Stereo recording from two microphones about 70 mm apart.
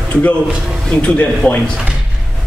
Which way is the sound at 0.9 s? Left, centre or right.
Centre.